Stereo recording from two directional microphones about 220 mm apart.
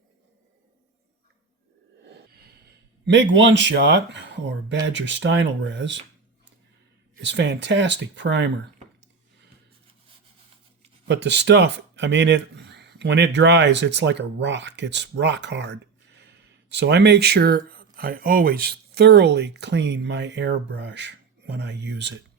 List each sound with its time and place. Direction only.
2.0 s a sound: 45° right (ahead or behind)
3.1 s speech: 55° right (ahead or behind)
7.2 s speech: 55° right (ahead or behind)
11.1 s speech: 50° right (ahead or behind)